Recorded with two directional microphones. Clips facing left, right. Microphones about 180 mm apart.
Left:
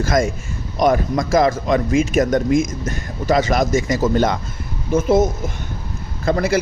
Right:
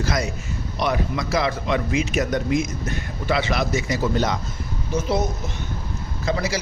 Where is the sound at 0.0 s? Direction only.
50° left (ahead or behind).